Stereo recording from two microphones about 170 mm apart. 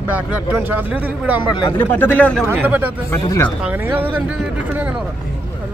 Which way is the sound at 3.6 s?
10° right (ahead or behind).